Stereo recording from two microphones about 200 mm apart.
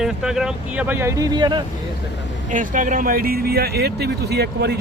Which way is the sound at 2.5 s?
40° right (ahead or behind).